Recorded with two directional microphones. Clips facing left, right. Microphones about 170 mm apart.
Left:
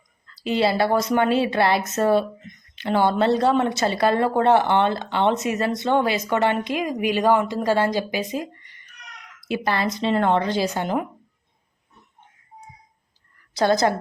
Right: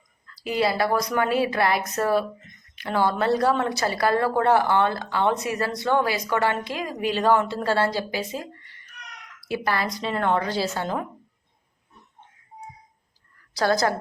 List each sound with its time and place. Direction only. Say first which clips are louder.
0.3 s speech: left 3 dB; 25° left (ahead or behind)
13.5 s a woman's voice: left 3 dB; 20° left (ahead or behind)